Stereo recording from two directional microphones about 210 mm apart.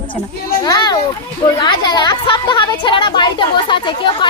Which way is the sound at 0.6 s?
20° left (ahead or behind).